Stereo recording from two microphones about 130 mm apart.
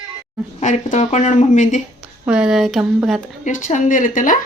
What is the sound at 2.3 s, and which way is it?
Speech, 5° right (ahead or behind).